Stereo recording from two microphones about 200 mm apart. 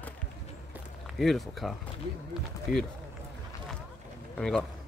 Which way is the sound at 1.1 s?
Centre (ahead or behind).